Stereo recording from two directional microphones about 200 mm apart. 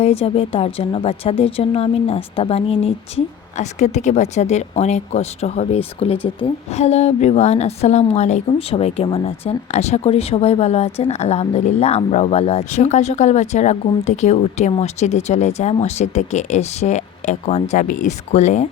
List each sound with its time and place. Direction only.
0.0 s speech: 30° left (ahead or behind)